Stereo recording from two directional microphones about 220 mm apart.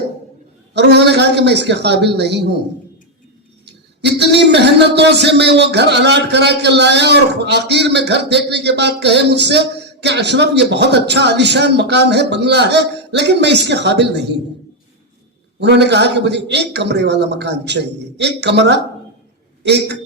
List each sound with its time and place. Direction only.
0.7 s a man's voice: 50° right (ahead or behind)
3.7 s a man's voice: 50° right (ahead or behind)
15.5 s a man's voice: 50° right (ahead or behind)